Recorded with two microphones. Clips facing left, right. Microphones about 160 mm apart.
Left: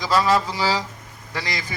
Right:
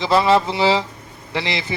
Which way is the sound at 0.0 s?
25° right (ahead or behind).